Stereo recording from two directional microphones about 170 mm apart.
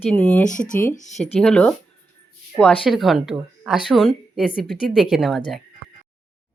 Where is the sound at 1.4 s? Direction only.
5° left (ahead or behind).